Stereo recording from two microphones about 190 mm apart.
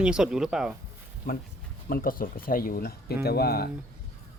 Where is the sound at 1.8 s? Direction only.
50° left (ahead or behind).